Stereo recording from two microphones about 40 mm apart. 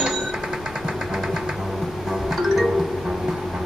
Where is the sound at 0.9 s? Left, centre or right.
Centre.